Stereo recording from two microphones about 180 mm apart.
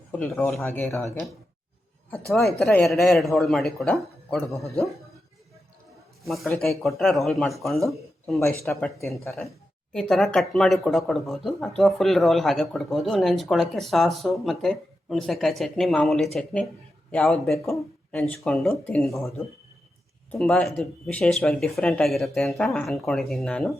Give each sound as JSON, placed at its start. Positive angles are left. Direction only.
{"t": 0.3, "sound": "speech", "side_deg": 10}
{"t": 2.3, "sound": "speech", "side_deg": 0}
{"t": 6.2, "sound": "speech", "side_deg": 0}
{"t": 8.7, "sound": "speech", "side_deg": 15}
{"t": 9.1, "sound": "speech", "side_deg": 0}
{"t": 20.4, "sound": "speech", "side_deg": 0}